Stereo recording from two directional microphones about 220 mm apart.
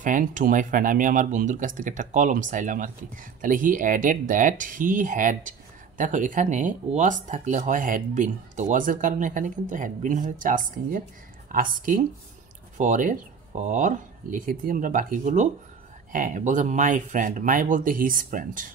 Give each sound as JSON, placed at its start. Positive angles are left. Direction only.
{"t": 0.0, "sound": "speech", "side_deg": -35}